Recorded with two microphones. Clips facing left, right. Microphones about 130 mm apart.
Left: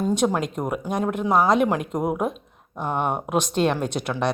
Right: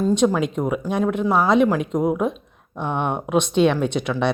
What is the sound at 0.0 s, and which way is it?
Speech, 10° left (ahead or behind).